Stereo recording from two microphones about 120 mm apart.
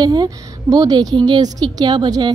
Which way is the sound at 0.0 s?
35° right (ahead or behind).